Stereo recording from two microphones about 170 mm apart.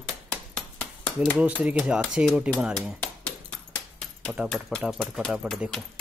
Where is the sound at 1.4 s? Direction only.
5° right (ahead or behind).